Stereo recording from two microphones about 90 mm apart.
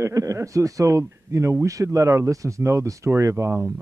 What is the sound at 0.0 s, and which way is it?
Speech, 35° right (ahead or behind).